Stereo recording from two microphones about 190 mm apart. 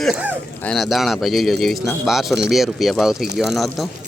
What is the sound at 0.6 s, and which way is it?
Speech, centre (ahead or behind).